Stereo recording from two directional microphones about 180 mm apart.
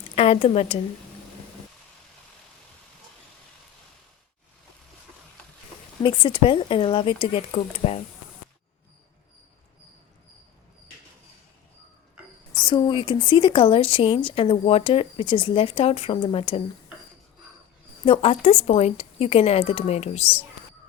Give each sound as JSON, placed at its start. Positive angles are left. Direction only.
{"t": 0.2, "sound": "speech", "side_deg": 35}
{"t": 6.0, "sound": "speech", "side_deg": 25}
{"t": 12.5, "sound": "speech", "side_deg": 25}
{"t": 18.0, "sound": "speech", "side_deg": 30}